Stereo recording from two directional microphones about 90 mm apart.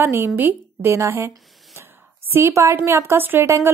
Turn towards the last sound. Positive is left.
turn(degrees=-25)  # may be behind; listen again after turning